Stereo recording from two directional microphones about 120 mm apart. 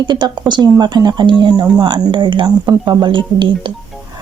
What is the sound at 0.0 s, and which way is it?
Speech, 40° right (ahead or behind).